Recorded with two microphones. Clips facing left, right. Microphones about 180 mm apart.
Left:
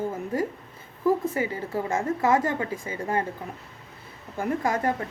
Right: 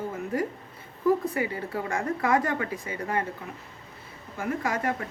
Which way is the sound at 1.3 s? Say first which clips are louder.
Left 2 dB; 25° left (ahead or behind).